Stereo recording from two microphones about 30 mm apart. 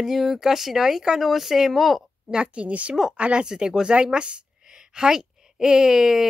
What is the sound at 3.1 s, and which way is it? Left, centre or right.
Speech, right.